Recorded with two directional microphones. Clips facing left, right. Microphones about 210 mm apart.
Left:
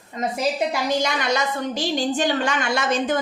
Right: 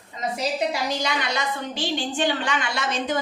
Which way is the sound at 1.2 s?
45° left (ahead or behind).